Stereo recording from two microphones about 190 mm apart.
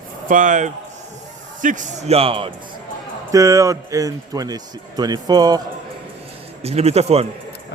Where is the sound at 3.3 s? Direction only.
15° right (ahead or behind).